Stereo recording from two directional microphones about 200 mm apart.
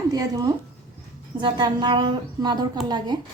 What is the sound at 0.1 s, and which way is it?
A woman's voice, 20° right (ahead or behind).